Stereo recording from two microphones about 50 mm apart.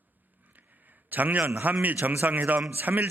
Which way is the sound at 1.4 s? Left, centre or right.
Right.